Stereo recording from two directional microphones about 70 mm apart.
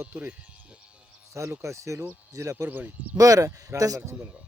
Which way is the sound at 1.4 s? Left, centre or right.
Right.